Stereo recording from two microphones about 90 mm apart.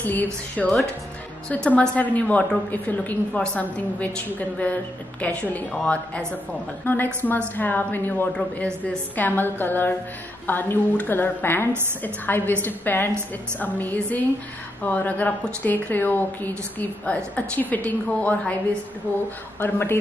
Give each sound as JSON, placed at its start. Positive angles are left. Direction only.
{"t": 0.0, "sound": "a woman's voice", "side_deg": 20}
{"t": 6.8, "sound": "a woman's voice", "side_deg": 25}
{"t": 19.6, "sound": "a woman's voice", "side_deg": 25}